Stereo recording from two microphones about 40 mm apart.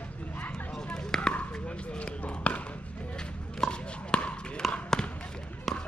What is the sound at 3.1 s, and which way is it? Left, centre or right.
Chop, left.